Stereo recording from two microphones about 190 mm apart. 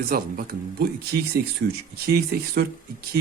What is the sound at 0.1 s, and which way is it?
Speech, 50° right (ahead or behind).